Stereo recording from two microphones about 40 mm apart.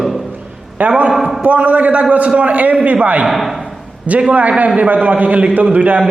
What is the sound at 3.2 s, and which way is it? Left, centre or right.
Speech, centre.